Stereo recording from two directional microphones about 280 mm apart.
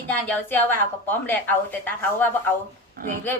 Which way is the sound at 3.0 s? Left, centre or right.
Right.